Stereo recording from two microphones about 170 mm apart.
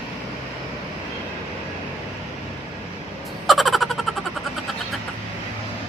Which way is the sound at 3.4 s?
Centre (ahead or behind).